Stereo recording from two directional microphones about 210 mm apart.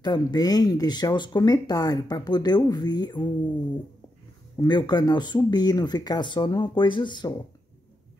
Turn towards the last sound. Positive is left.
turn(degrees=20)  # may be behind; listen again after turning